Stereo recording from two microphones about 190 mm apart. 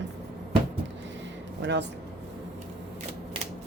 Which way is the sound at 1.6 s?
65° right (ahead or behind).